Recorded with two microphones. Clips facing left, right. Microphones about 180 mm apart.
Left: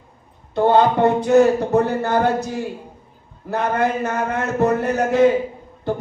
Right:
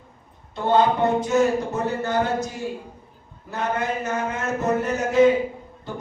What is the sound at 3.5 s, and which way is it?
A man's voice, 60° left (ahead or behind).